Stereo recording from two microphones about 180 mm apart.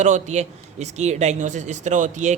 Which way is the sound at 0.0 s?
40° right (ahead or behind).